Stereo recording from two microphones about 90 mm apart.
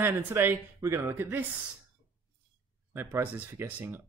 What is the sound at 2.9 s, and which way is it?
Speech, 25° right (ahead or behind).